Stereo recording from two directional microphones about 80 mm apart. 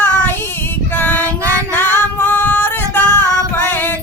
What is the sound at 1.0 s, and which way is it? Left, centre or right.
Female singing, left.